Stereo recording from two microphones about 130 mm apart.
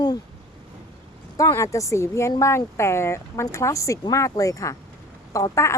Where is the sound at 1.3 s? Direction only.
25° left (ahead or behind).